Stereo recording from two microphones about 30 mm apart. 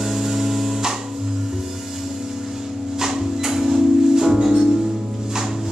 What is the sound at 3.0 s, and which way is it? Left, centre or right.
Music, centre.